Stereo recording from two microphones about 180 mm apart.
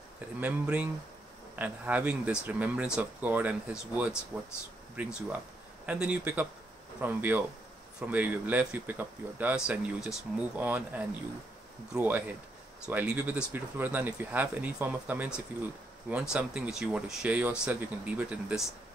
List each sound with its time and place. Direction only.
0.4 s speech: 5° right (ahead or behind)
5.9 s speech: 5° right (ahead or behind)